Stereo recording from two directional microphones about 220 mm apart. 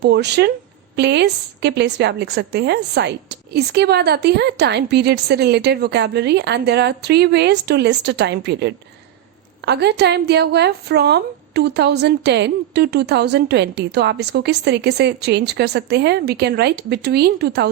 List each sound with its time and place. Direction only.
0.0 s a woman's voice: 50° right (ahead or behind)